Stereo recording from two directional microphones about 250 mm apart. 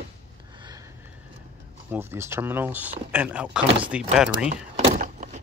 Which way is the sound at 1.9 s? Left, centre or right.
Centre.